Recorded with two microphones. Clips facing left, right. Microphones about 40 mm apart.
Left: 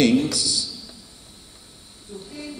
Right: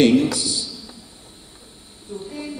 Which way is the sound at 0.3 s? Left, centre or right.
Right.